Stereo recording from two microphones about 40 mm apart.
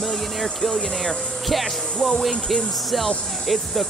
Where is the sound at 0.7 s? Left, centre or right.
Centre.